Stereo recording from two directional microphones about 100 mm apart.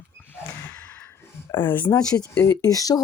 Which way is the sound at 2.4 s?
35° left (ahead or behind).